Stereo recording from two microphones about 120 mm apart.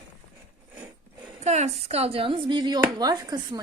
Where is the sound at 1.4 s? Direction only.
65° right (ahead or behind).